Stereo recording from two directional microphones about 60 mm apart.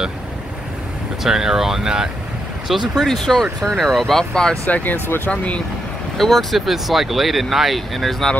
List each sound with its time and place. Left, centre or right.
1.2 s speech: centre
4.6 s speech: left
5.0 s speech: left
5.3 s speech: left
6.1 s speech: centre